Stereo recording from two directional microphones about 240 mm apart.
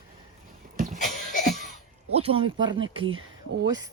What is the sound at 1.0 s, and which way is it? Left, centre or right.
Cough, left.